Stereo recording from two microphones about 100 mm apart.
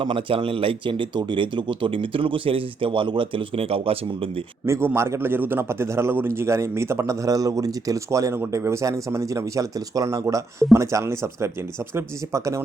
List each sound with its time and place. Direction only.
0.0 s speech: 60° right (ahead or behind)
4.6 s a man's voice: 30° right (ahead or behind)